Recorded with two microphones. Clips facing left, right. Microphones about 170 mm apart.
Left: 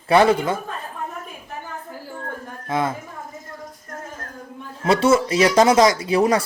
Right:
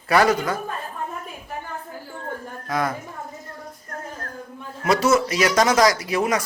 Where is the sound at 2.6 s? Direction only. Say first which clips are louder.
Left 2 dB; 25° left (ahead or behind).